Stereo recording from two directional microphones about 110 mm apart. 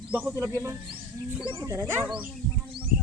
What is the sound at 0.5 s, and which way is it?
Speech, 25° right (ahead or behind).